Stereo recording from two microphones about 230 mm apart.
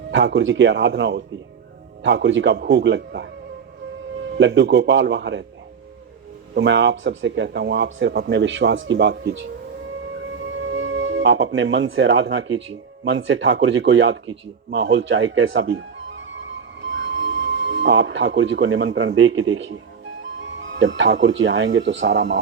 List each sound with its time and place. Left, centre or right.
0.1 s speech: right
4.4 s speech: right
6.5 s speech: right
10.5 s speech: right
17.2 s speech: right
20.4 s speech: right